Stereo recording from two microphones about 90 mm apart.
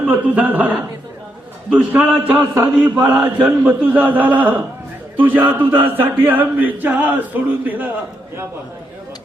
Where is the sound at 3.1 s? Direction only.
15° right (ahead or behind).